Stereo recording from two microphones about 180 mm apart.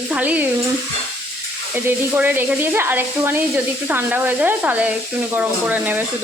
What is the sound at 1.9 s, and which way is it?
Speech, 10° right (ahead or behind).